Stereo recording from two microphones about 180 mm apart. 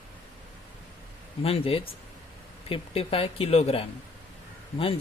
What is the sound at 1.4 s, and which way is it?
Speech, 30° left (ahead or behind).